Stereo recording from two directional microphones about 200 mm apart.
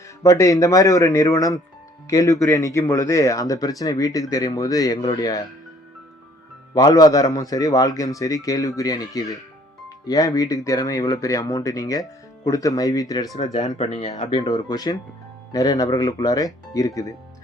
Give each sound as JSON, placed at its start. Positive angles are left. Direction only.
{"t": 0.2, "sound": "speech", "side_deg": 15}
{"t": 6.7, "sound": "speech", "side_deg": 20}
{"t": 13.4, "sound": "speech", "side_deg": 35}
{"t": 14.2, "sound": "speech", "side_deg": 20}